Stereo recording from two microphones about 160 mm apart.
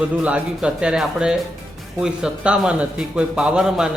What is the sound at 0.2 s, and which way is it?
A man's voice, 10° right (ahead or behind).